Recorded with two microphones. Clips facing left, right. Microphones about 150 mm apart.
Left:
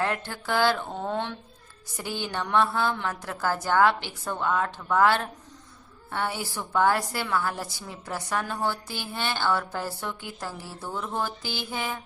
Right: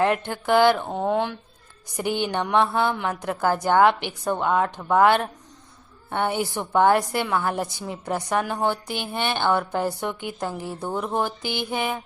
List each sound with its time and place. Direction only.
0.0 s a woman's voice: 20° right (ahead or behind)